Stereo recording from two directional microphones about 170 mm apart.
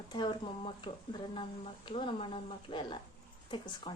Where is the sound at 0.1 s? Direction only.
25° left (ahead or behind).